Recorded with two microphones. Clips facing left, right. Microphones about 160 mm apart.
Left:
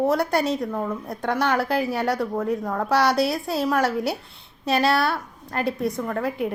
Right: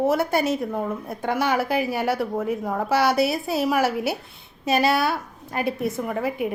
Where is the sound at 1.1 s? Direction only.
5° right (ahead or behind).